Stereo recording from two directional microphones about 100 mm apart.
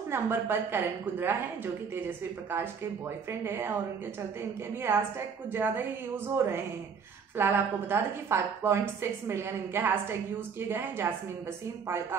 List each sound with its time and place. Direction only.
0.1 s a woman's voice: 25° right (ahead or behind)
4.9 s a woman's voice: 25° right (ahead or behind)